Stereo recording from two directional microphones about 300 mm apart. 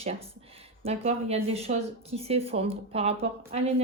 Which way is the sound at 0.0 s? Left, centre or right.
Centre.